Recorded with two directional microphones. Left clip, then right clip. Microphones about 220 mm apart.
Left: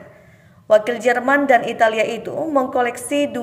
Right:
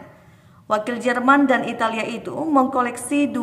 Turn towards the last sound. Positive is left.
turn(degrees=0)  # may be behind; listen again after turning